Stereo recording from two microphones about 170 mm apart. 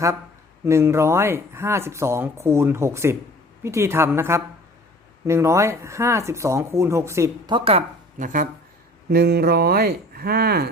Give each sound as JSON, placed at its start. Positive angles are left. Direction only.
{"t": 0.6, "sound": "speech", "side_deg": -15}
{"t": 7.5, "sound": "speech", "side_deg": -35}
{"t": 8.2, "sound": "speech", "side_deg": -50}
{"t": 9.0, "sound": "speech", "side_deg": -65}